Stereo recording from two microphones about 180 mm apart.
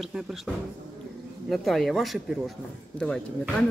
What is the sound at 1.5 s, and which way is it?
Speech, centre (ahead or behind).